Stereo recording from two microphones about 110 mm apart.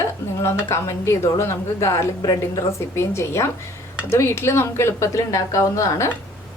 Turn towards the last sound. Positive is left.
turn(degrees=25)  # may be behind; listen again after turning